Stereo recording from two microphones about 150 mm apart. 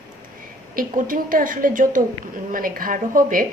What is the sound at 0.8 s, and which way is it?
A woman's voice, 65° right (ahead or behind).